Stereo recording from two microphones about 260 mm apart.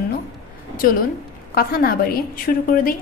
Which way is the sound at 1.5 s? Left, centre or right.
Left.